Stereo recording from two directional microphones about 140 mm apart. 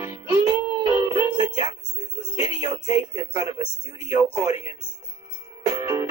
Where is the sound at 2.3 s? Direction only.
45° left (ahead or behind).